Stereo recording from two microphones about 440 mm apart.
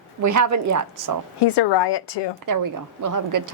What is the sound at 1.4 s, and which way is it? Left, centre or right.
Speech, left.